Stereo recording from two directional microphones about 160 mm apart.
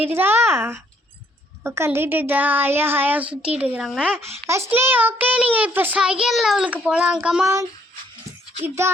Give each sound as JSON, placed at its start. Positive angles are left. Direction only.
{"t": 0.0, "sound": "a child's voice", "side_deg": -10}
{"t": 4.4, "sound": "a child's voice", "side_deg": -15}
{"t": 7.4, "sound": "a child's voice", "side_deg": -20}